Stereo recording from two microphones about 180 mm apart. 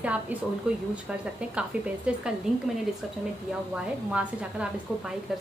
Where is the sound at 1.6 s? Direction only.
5° right (ahead or behind).